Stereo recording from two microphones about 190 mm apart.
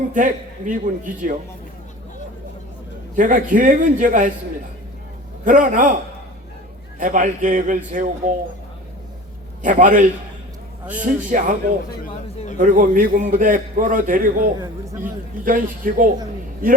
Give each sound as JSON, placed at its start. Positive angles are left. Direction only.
{"t": 0.1, "sound": "a man's voice", "side_deg": -45}
{"t": 3.2, "sound": "a man's voice", "side_deg": -45}
{"t": 5.5, "sound": "a man's voice", "side_deg": -45}
{"t": 7.0, "sound": "a man's voice", "side_deg": -40}
{"t": 9.6, "sound": "a man's voice", "side_deg": -45}
{"t": 12.5, "sound": "a man's voice", "side_deg": -45}
{"t": 14.6, "sound": "speech", "side_deg": -15}
{"t": 15.4, "sound": "a man's voice", "side_deg": -45}